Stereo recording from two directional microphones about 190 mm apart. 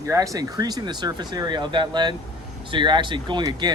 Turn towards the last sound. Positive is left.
turn(degrees=-20)  # may be behind; listen again after turning